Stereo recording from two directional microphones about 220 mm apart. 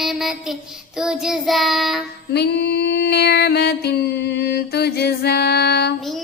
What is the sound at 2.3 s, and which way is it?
Female singing, 50° left (ahead or behind).